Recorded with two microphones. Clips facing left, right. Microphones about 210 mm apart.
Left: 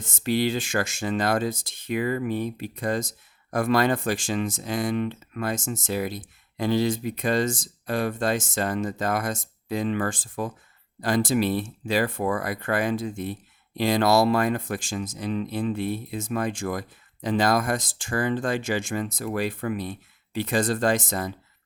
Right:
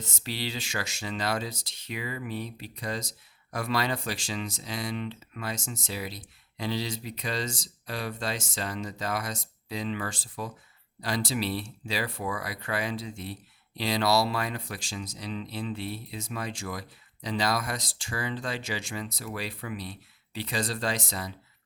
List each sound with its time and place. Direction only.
0.0 s speech: 50° left (ahead or behind)